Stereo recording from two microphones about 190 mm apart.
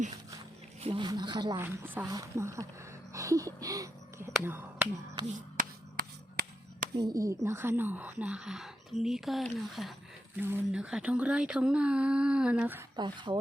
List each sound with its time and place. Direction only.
0.8 s a woman's voice: 30° right (ahead or behind)
1.6 s speech: 10° right (ahead or behind)
3.1 s a sound: 15° right (ahead or behind)
4.3 s speech: 10° right (ahead or behind)
5.3 s a sound: 45° right (ahead or behind)
7.0 s speech: 15° right (ahead or behind)
13.0 s a woman's voice: 25° right (ahead or behind)